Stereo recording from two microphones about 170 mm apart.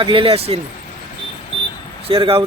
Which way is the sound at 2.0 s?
35° right (ahead or behind).